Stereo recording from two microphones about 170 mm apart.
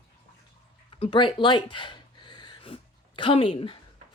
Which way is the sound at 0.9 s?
30° left (ahead or behind).